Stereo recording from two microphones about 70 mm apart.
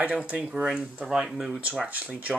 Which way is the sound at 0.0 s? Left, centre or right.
Centre.